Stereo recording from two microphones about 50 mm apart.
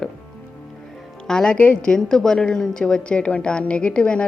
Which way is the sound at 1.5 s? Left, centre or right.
Left.